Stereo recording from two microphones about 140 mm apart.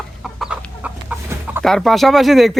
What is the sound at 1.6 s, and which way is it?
Speech, centre (ahead or behind).